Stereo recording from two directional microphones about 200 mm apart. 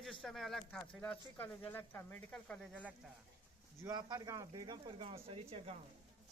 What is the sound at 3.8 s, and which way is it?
Speech, 15° right (ahead or behind).